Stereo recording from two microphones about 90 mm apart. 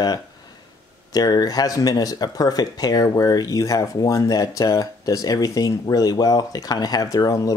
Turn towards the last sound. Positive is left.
turn(degrees=40)  # may be behind; listen again after turning